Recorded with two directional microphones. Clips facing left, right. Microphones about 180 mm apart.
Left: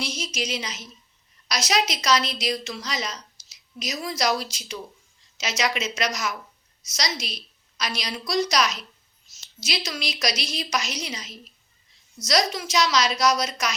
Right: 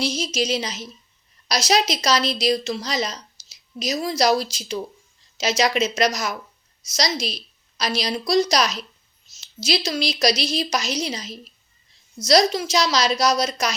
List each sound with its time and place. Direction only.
0.0 s a woman's voice: 30° right (ahead or behind)